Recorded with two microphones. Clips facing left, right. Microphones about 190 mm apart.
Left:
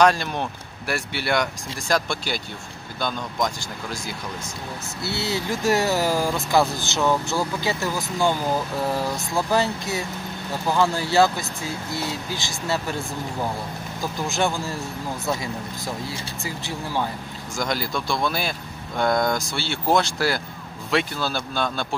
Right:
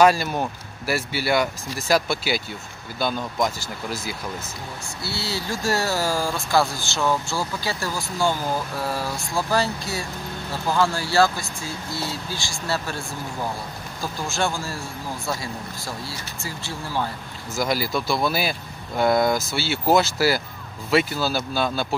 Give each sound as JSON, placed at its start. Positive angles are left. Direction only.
{"t": 0.0, "sound": "speech", "side_deg": -5}
{"t": 5.0, "sound": "speech", "side_deg": 20}
{"t": 14.2, "sound": "speech", "side_deg": 20}
{"t": 16.1, "sound": "speech", "side_deg": 15}
{"t": 17.6, "sound": "speech", "side_deg": -5}